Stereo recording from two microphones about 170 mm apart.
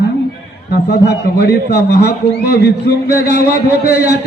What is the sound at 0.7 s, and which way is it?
A man's voice, 70° left (ahead or behind).